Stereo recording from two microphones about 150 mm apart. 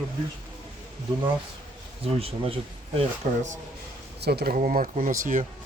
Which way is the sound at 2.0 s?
40° right (ahead or behind).